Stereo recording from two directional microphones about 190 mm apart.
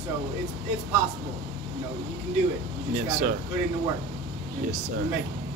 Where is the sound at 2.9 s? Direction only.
45° right (ahead or behind).